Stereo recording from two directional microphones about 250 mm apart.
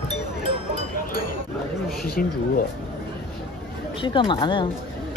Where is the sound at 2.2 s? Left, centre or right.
Left.